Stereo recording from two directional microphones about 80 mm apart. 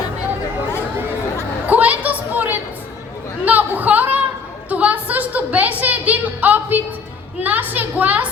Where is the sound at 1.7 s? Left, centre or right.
Centre.